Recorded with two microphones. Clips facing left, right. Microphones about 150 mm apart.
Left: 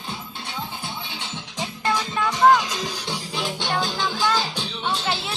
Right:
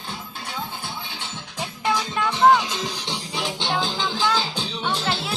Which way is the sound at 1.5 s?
5° right (ahead or behind).